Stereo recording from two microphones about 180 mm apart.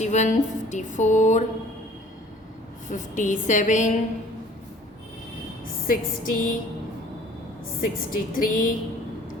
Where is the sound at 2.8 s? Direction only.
45° left (ahead or behind).